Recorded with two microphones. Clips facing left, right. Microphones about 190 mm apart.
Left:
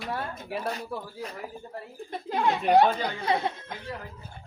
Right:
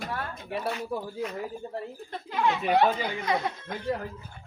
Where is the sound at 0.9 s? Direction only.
15° right (ahead or behind).